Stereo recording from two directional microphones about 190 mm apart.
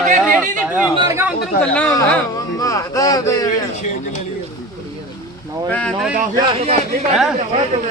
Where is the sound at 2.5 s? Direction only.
15° left (ahead or behind).